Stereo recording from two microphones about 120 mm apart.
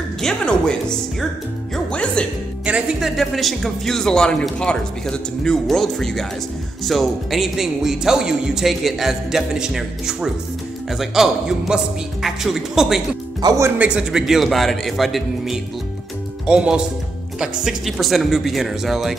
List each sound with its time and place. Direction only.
0.2 s a woman's voice: 5° left (ahead or behind)
1.9 s music: 10° left (ahead or behind)
2.6 s speech: 10° right (ahead or behind)
3.2 s speech: centre (ahead or behind)
13.4 s speech: 30° right (ahead or behind)
13.7 s speech: 10° right (ahead or behind)